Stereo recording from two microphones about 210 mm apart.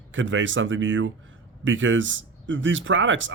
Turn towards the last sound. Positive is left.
turn(degrees=-65)  # may be behind; listen again after turning